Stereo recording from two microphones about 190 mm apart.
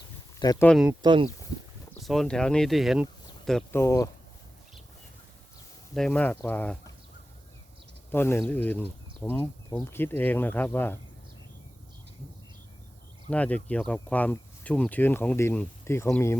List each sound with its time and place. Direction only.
0.3 s speech: 20° left (ahead or behind)
0.6 s speech: 5° left (ahead or behind)
1.0 s speech: 25° right (ahead or behind)
2.0 s speech: centre (ahead or behind)
3.8 s speech: 15° left (ahead or behind)
5.9 s speech: 5° left (ahead or behind)
8.1 s speech: 10° left (ahead or behind)
13.3 s speech: 5° left (ahead or behind)